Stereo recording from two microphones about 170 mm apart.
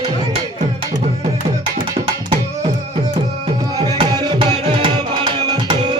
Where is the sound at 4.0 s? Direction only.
25° right (ahead or behind).